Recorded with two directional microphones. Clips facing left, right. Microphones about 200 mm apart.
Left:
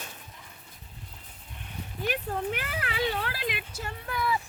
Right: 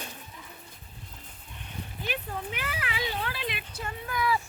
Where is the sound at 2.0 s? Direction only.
50° left (ahead or behind).